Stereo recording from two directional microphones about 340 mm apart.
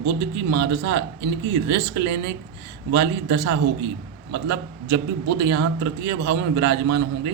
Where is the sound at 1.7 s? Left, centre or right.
Right.